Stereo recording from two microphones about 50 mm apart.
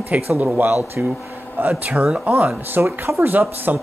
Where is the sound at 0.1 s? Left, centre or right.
Right.